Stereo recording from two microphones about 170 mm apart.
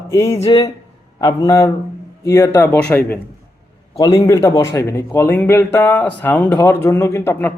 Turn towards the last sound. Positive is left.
turn(degrees=15)  # may be behind; listen again after turning